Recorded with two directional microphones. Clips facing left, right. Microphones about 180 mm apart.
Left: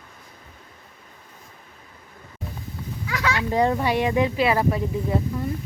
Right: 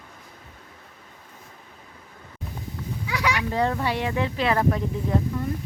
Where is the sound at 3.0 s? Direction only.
15° right (ahead or behind).